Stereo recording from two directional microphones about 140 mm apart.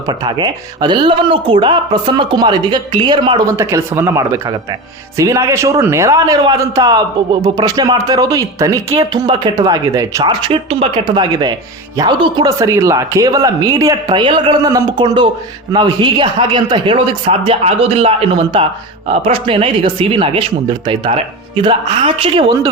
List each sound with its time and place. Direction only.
0.1 s a man's voice: 35° right (ahead or behind)
11.0 s a man's voice: 30° right (ahead or behind)
14.7 s a man's voice: 25° right (ahead or behind)
14.9 s speech: 35° right (ahead or behind)